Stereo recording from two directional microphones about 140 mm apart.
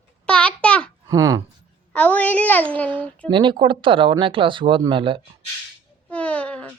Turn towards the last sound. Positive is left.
turn(degrees=10)  # may be behind; listen again after turning